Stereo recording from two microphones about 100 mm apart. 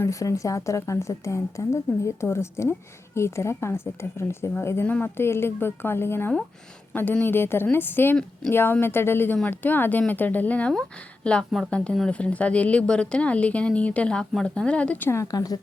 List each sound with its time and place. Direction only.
0.0 s a woman's voice: 30° left (ahead or behind)
15.2 s speech: 40° left (ahead or behind)